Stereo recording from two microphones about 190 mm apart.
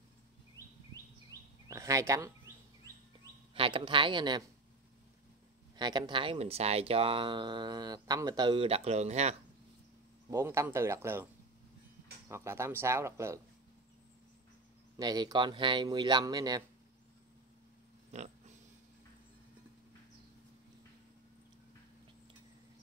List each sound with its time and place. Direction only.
1.7 s a sound: 15° right (ahead or behind)
3.5 s speech: 25° right (ahead or behind)
5.8 s speech: 20° right (ahead or behind)
10.3 s speech: 15° right (ahead or behind)
12.3 s speech: 15° right (ahead or behind)
15.0 s speech: 20° right (ahead or behind)
18.1 s speech: 35° right (ahead or behind)